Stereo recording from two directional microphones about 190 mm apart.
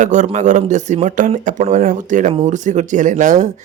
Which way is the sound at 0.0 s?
40° right (ahead or behind).